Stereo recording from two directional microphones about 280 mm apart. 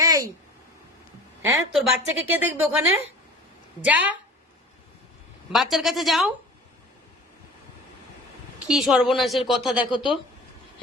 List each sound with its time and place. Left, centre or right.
0.0 s a sound: centre
1.4 s a woman's voice: centre
5.5 s a woman's voice: centre
8.6 s a woman's voice: centre
9.9 s speech: centre